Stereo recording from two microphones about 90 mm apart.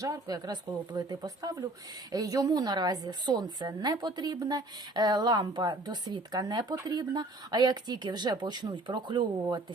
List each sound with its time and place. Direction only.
0.0 s a woman's voice: 45° right (ahead or behind)